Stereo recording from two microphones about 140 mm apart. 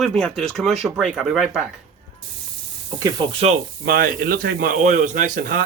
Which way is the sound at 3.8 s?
90° right.